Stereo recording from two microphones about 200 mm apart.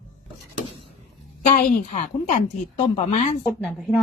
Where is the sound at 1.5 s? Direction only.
40° left (ahead or behind).